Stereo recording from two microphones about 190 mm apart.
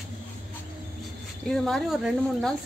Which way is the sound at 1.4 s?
Centre (ahead or behind).